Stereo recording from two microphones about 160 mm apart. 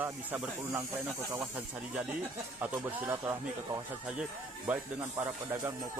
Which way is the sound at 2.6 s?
10° right (ahead or behind).